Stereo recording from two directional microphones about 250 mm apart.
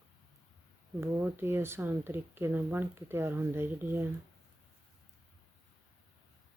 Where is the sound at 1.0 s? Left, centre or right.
Centre.